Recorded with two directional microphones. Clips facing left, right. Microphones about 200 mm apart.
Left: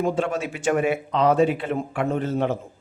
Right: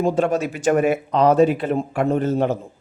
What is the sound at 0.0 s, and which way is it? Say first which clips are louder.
A man's voice: right 4 dB; 40° right (ahead or behind).